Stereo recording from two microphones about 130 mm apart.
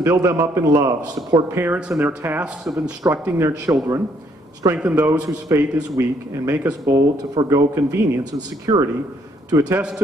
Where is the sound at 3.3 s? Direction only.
25° right (ahead or behind).